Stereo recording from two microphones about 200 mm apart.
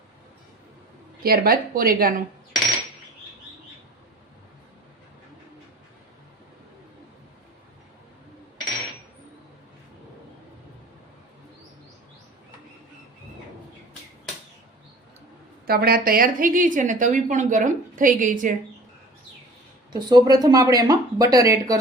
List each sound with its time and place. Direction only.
1.2 s speech: 50° right (ahead or behind)
15.6 s a woman's voice: 50° right (ahead or behind)
19.9 s speech: 20° right (ahead or behind)